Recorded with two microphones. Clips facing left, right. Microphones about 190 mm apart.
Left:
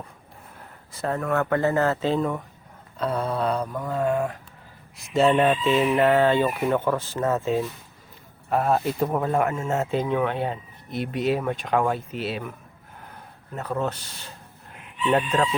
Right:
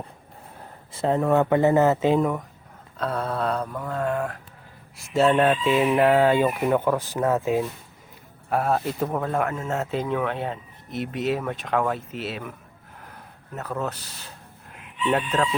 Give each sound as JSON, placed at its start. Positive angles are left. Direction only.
{"t": 0.9, "sound": "speech", "side_deg": -20}
{"t": 3.0, "sound": "speech", "side_deg": 0}
{"t": 5.6, "sound": "speech", "side_deg": -10}
{"t": 8.4, "sound": "speech", "side_deg": 0}
{"t": 13.6, "sound": "speech", "side_deg": 0}